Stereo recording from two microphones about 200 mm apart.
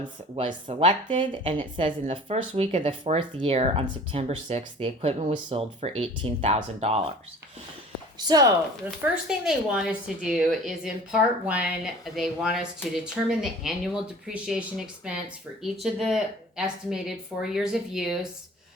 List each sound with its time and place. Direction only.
0.3 s speech: 30° right (ahead or behind)
8.2 s speech: 20° right (ahead or behind)
9.2 s speech: 5° right (ahead or behind)